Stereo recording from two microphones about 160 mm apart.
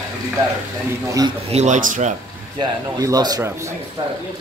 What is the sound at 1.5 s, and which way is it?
Speech, 45° right (ahead or behind).